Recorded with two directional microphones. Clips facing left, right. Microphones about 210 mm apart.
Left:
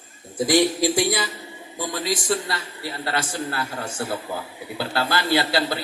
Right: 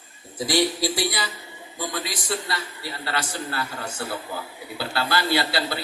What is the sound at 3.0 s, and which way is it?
Speech, 50° left (ahead or behind).